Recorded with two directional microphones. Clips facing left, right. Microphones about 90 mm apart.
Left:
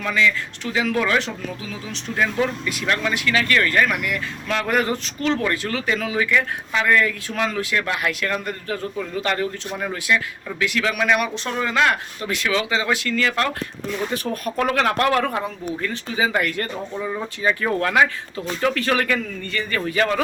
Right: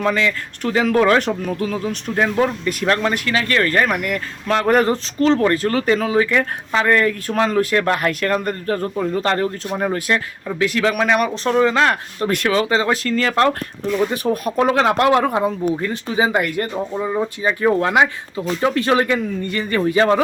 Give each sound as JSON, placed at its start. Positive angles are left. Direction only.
{"t": 0.0, "sound": "speech", "side_deg": -40}
{"t": 2.1, "sound": "speech", "side_deg": -35}
{"t": 9.2, "sound": "speech", "side_deg": -35}
{"t": 12.3, "sound": "speech", "side_deg": -45}
{"t": 14.1, "sound": "speech", "side_deg": -20}